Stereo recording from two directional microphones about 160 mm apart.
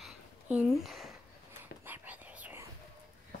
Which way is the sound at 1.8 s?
10° right (ahead or behind).